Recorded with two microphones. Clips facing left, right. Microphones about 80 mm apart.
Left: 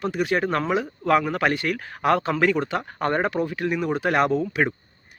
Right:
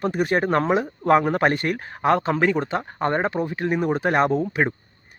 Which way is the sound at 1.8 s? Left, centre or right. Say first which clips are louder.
Right 1 dB; right.